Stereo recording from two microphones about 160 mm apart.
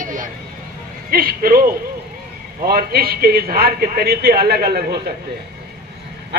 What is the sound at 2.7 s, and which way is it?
A man's voice, 70° right (ahead or behind).